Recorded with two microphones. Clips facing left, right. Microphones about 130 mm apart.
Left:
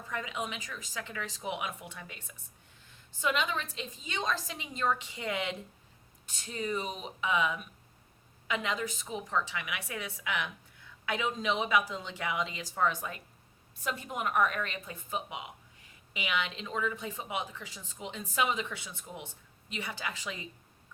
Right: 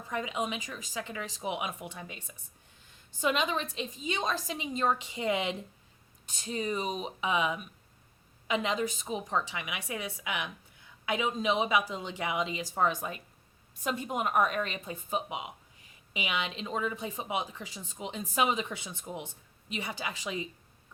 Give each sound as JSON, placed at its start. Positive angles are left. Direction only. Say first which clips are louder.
{"t": 0.1, "sound": "speech", "louder": "right 4 dB", "side_deg": -20}